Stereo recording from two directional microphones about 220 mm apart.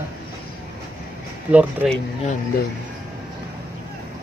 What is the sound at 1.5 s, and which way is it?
Speech, 5° right (ahead or behind).